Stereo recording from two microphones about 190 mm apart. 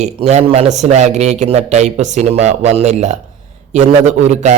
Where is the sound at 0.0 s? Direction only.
35° right (ahead or behind).